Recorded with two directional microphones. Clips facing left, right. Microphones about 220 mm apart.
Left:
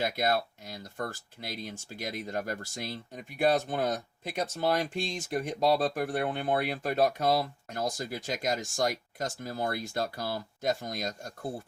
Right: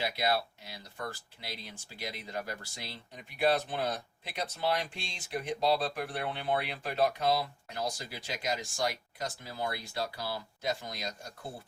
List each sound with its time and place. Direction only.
0.0 s speech: 45° left (ahead or behind)